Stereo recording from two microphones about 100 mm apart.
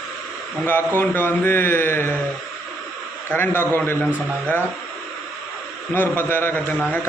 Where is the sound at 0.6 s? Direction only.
20° left (ahead or behind).